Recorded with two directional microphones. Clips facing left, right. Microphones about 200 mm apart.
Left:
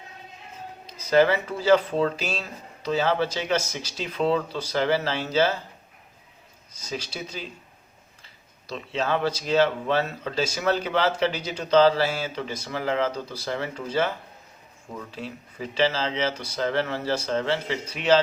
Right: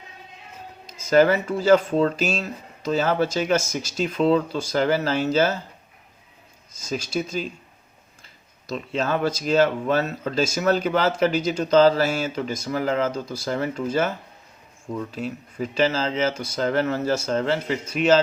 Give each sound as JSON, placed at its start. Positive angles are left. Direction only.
{"t": 0.9, "sound": "speech", "side_deg": -45}
{"t": 6.7, "sound": "speech", "side_deg": -45}
{"t": 15.5, "sound": "speech", "side_deg": -45}